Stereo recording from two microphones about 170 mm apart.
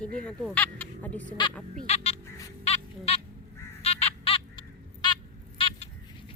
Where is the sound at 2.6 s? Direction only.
35° left (ahead or behind).